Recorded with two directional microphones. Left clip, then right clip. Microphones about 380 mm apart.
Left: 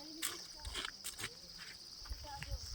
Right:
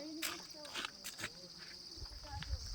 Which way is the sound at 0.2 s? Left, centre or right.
Centre.